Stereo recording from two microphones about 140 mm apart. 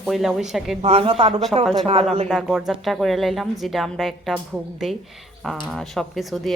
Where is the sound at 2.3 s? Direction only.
5° right (ahead or behind).